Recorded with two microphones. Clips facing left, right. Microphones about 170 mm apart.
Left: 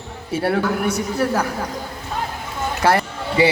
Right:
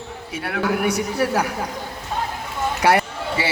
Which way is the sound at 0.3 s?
30° left (ahead or behind).